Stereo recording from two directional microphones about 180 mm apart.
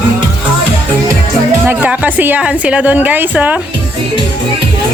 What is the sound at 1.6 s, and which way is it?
A woman's voice, 5° right (ahead or behind).